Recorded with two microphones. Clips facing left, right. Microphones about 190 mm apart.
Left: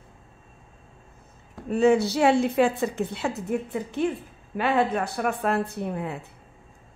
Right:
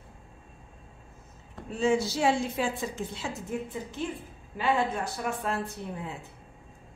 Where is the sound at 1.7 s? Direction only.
60° left (ahead or behind).